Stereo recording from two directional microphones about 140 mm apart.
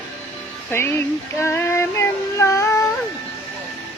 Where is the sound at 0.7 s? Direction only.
15° left (ahead or behind).